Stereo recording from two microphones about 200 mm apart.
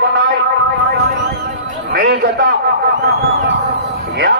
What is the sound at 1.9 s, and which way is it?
Speech, 50° right (ahead or behind).